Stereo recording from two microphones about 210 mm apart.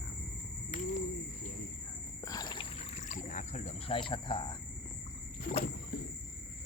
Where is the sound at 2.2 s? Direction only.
15° left (ahead or behind).